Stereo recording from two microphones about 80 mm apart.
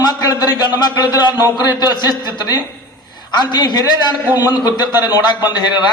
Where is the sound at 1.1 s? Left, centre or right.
Left.